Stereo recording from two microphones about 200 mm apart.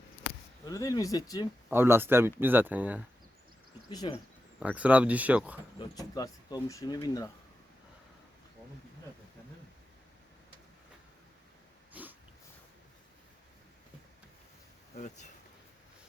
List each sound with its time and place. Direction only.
0.6 s speech: 15° left (ahead or behind)
1.7 s speech: 10° right (ahead or behind)
3.8 s speech: 20° left (ahead or behind)
4.6 s speech: 5° right (ahead or behind)
5.8 s speech: 20° left (ahead or behind)
11.9 s dog: 10° right (ahead or behind)
14.9 s speech: 35° left (ahead or behind)